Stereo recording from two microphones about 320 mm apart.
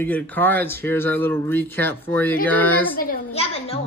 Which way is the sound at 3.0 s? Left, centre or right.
Left.